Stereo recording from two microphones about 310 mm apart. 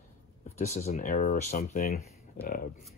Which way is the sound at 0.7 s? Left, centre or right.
Left.